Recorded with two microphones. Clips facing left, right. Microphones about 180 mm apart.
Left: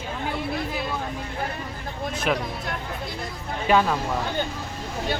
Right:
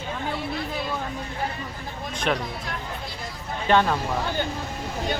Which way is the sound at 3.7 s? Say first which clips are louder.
Even; 5° left (ahead or behind).